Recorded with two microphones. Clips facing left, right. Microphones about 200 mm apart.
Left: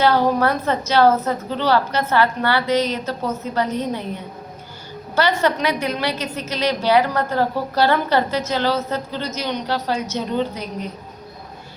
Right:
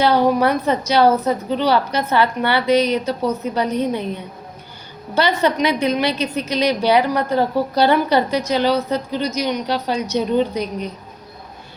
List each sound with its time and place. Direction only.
0.0 s a woman's voice: 15° right (ahead or behind)
5.1 s a woman's voice: 20° right (ahead or behind)